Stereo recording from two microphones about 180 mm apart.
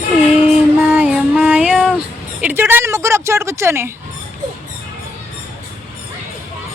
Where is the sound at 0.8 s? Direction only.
10° right (ahead or behind).